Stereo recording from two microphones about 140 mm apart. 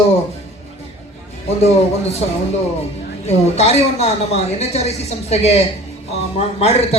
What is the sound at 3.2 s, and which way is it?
A woman's voice, 50° left (ahead or behind).